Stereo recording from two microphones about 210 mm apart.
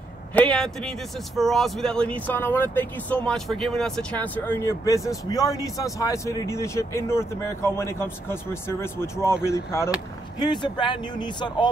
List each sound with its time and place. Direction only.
0.3 s speech: 5° left (ahead or behind); by 11.7 s 20° left (ahead or behind)